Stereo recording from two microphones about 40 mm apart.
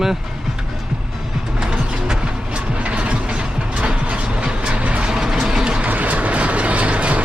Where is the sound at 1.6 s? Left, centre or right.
Right.